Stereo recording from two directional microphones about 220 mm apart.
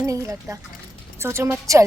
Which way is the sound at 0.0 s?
15° right (ahead or behind).